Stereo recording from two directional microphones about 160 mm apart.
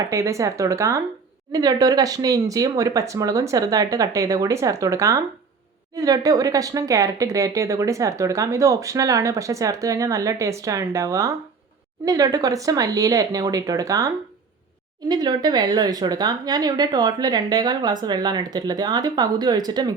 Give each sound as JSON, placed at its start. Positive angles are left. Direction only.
{"t": 0.0, "sound": "speech", "side_deg": -20}
{"t": 15.1, "sound": "speech", "side_deg": -25}